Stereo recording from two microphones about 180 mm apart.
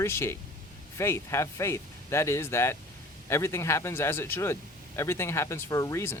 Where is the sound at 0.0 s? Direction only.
15° left (ahead or behind).